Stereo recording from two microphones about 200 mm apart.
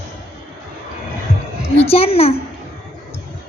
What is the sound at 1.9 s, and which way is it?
Speech, 30° left (ahead or behind).